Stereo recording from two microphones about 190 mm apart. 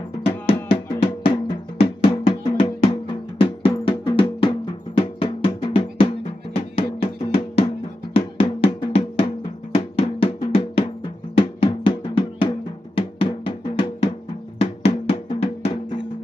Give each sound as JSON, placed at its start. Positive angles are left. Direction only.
{"t": 0.2, "sound": "music", "side_deg": 30}
{"t": 4.9, "sound": "drum", "side_deg": 30}
{"t": 6.5, "sound": "music", "side_deg": 30}